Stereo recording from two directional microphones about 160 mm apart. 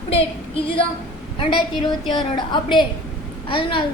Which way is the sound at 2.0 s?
30° left (ahead or behind).